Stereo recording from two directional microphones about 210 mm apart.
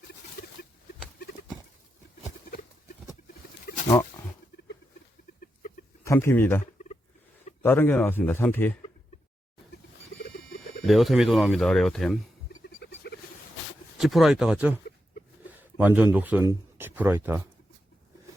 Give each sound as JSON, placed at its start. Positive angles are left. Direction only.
{"t": 3.7, "sound": "pig", "side_deg": 45}
{"t": 5.4, "sound": "chicken", "side_deg": 40}
{"t": 6.1, "sound": "a man's voice", "side_deg": 10}
{"t": 7.6, "sound": "a man's voice", "side_deg": 10}
{"t": 10.8, "sound": "speech", "side_deg": 0}
{"t": 12.6, "sound": "a sound", "side_deg": 50}
{"t": 14.0, "sound": "speech", "side_deg": 0}